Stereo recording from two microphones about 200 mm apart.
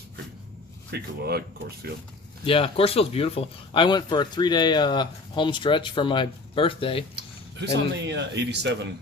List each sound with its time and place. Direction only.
0.9 s speech: 55° right (ahead or behind)
2.4 s speech: 25° left (ahead or behind)
7.6 s a man's voice: 60° right (ahead or behind)